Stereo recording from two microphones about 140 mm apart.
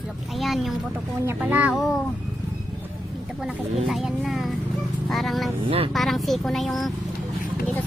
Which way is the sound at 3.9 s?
Centre (ahead or behind).